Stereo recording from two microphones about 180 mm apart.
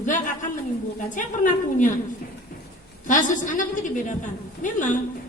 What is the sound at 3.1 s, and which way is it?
A woman's voice, 45° left (ahead or behind).